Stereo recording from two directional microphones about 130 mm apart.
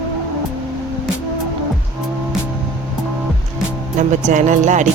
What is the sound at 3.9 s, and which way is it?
Speech, 65° right (ahead or behind).